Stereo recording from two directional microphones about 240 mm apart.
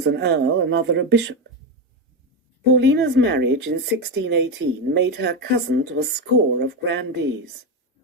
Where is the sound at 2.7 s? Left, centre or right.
Right.